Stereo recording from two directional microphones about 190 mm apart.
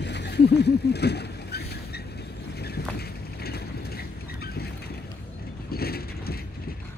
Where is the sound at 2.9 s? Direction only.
55° left (ahead or behind).